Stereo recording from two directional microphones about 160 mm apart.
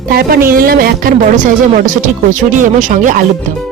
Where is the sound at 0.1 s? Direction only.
70° right (ahead or behind).